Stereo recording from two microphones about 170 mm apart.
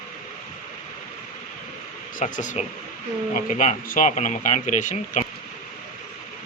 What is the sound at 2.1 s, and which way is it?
Speech, 50° left (ahead or behind).